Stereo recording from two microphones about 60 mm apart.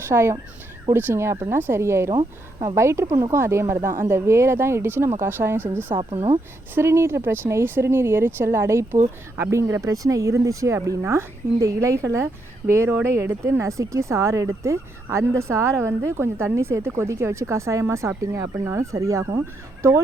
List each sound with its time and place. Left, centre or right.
0.0 s speech: right
6.7 s a woman's voice: right
11.0 s speech: right
13.6 s a woman's voice: right